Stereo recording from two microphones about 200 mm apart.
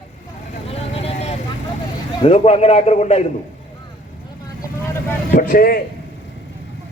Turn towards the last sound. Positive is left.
turn(degrees=45)  # may be behind; listen again after turning